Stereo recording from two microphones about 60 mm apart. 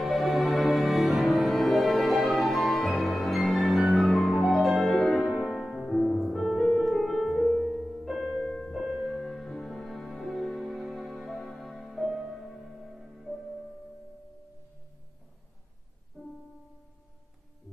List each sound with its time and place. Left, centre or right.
0.0 s music: centre
7.5 s music: centre
8.0 s music: centre
8.4 s music: centre
8.7 s music: centre
12.0 s music: centre
16.2 s music: centre